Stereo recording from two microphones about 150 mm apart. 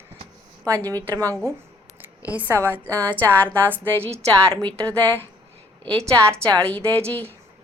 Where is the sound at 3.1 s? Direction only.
10° left (ahead or behind).